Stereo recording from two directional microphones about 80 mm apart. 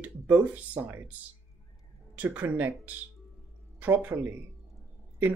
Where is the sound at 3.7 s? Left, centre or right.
Right.